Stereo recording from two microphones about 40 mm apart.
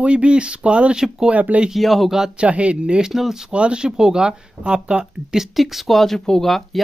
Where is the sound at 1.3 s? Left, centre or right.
Right.